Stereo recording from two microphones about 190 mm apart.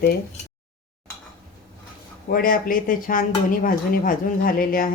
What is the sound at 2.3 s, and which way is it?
Speech, 50° left (ahead or behind).